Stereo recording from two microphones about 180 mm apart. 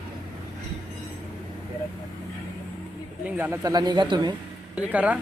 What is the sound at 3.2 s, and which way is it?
Speech, 15° right (ahead or behind).